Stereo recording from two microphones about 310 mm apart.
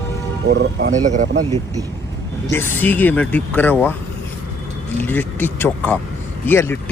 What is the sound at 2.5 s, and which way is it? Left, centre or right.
Speech, centre.